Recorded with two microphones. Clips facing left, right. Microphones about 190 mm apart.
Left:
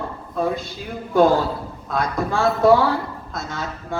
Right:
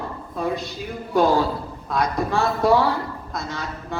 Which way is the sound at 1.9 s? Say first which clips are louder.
Even; 50° left (ahead or behind).